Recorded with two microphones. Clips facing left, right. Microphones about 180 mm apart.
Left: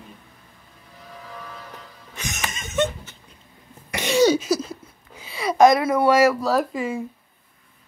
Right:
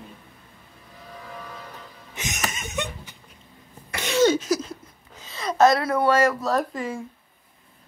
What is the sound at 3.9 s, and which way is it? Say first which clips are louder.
Cough: left 2 dB; 15° left (ahead or behind).